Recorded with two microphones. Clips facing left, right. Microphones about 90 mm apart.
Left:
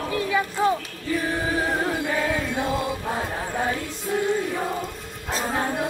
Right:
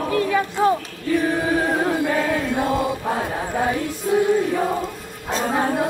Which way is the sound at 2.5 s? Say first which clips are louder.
Right 4 dB; 20° right (ahead or behind).